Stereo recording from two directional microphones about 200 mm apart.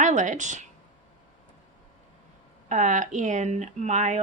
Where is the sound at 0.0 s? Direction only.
35° right (ahead or behind).